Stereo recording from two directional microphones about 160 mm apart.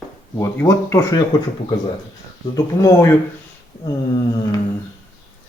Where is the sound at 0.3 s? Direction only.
15° left (ahead or behind).